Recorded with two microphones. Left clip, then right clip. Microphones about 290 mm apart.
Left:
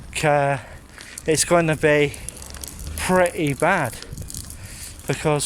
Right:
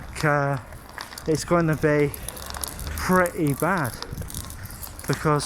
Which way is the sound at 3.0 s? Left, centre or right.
Left.